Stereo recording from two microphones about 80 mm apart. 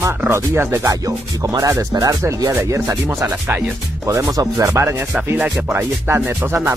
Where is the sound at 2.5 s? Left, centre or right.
Right.